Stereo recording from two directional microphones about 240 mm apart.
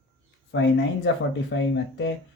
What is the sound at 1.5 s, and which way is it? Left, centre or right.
Speech, left.